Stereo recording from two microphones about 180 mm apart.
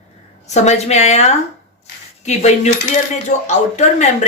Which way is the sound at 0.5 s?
40° left (ahead or behind).